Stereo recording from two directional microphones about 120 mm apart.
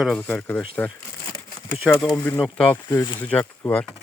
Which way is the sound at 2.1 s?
20° left (ahead or behind).